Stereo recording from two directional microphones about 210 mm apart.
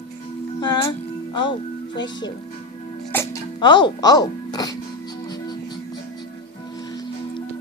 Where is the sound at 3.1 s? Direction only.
10° left (ahead or behind).